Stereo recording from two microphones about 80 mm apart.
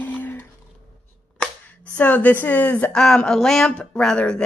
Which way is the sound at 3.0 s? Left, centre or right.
Centre.